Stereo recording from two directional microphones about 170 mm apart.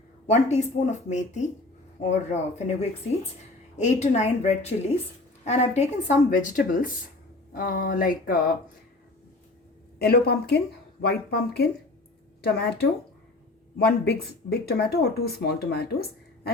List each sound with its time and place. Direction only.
0.3 s a woman's voice: 45° left (ahead or behind)
3.8 s a woman's voice: 45° left (ahead or behind)
7.5 s a sound: 55° left (ahead or behind)
10.0 s speech: 70° left (ahead or behind)